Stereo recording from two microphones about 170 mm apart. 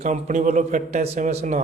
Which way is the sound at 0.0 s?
45° right (ahead or behind).